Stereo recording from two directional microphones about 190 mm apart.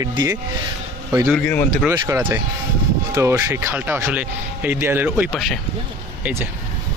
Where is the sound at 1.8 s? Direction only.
10° right (ahead or behind).